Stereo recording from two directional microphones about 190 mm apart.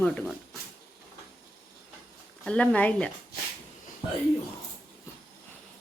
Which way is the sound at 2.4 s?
5° left (ahead or behind).